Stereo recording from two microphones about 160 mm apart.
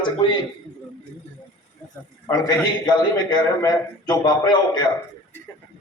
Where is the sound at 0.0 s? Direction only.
30° left (ahead or behind).